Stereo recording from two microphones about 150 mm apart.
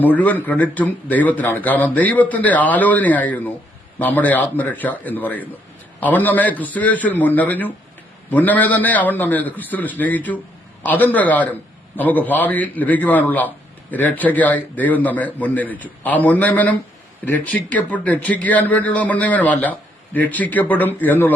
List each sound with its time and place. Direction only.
0.0 s speech: 10° left (ahead or behind)